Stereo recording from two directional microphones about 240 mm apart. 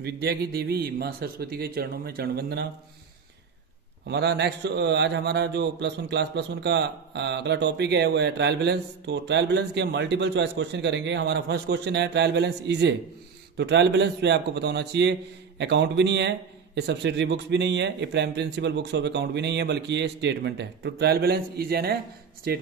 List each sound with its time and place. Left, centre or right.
0.0 s a man's voice: right
4.1 s a man's voice: right